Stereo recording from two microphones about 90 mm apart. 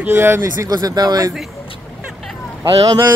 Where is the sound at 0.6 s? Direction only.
45° right (ahead or behind).